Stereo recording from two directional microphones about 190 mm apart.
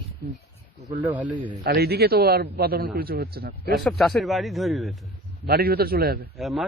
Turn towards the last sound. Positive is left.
turn(degrees=0)  # may be behind; listen again after turning